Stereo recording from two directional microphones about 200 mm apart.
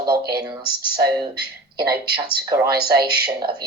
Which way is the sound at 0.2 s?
55° right (ahead or behind).